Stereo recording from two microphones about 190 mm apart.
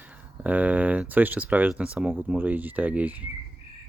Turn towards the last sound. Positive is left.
turn(degrees=-10)  # may be behind; listen again after turning